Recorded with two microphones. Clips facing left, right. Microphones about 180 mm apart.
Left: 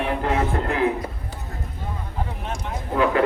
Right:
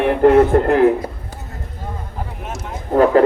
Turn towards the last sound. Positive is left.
turn(degrees=-45)  # may be behind; listen again after turning